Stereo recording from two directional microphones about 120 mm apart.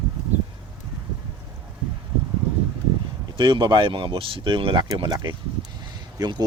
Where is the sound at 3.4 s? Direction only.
40° right (ahead or behind).